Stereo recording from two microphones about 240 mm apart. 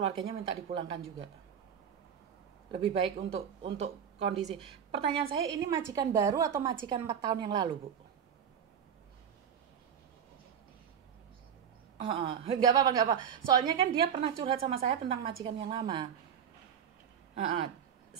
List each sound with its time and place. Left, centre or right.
0.2 s speech: right
2.7 s a woman's voice: right
12.0 s speech: right